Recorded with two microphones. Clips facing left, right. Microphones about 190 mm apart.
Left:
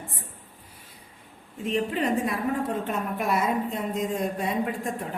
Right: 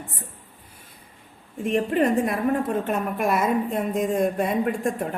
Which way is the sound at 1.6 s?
50° right (ahead or behind).